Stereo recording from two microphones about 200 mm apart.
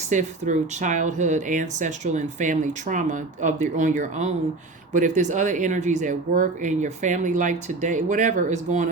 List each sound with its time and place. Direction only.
0.1 s speech: 40° right (ahead or behind)